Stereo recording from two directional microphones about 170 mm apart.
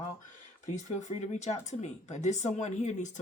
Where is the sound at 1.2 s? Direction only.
40° left (ahead or behind).